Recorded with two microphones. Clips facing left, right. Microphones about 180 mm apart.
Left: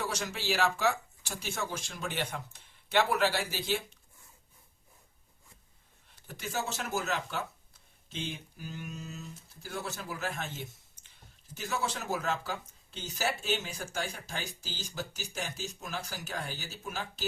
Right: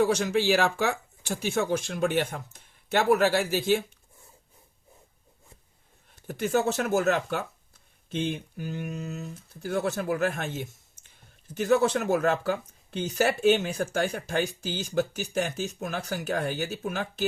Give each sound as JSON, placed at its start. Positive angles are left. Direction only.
{"t": 0.0, "sound": "speech", "side_deg": -55}
{"t": 6.1, "sound": "speech", "side_deg": -55}